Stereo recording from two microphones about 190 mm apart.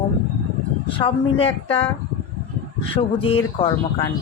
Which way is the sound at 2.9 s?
30° left (ahead or behind).